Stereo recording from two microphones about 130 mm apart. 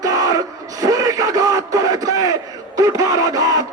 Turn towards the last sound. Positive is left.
turn(degrees=-30)  # may be behind; listen again after turning